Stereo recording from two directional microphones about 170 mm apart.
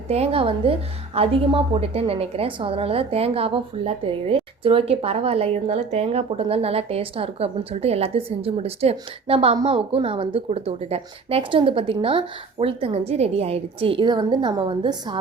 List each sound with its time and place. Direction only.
0.1 s a woman's voice: 35° right (ahead or behind)